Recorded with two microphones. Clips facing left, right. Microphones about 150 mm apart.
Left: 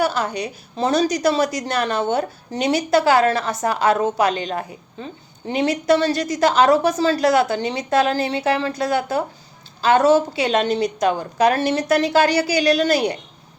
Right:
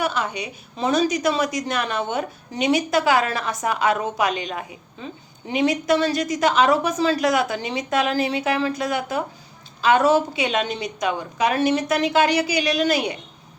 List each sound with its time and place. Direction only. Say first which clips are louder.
0.0 s a woman's voice: left 4 dB; 35° left (ahead or behind)